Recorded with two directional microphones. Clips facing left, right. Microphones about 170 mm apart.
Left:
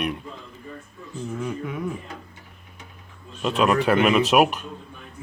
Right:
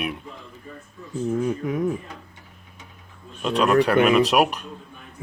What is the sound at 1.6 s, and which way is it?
Speech, 45° right (ahead or behind).